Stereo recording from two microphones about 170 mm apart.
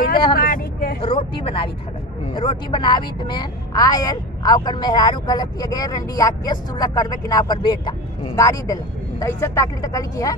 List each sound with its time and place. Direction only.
0.3 s vehicle: 60° left (ahead or behind)
1.0 s a woman's voice: 30° left (ahead or behind)